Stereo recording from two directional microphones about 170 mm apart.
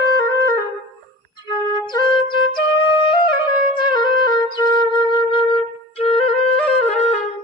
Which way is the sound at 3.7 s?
25° left (ahead or behind).